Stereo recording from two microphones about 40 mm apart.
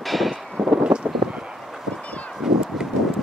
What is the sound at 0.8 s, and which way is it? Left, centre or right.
Wind, right.